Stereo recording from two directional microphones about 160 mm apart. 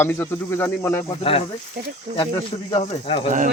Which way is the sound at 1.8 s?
90° right.